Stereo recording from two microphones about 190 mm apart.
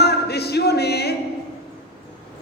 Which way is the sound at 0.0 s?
60° left (ahead or behind).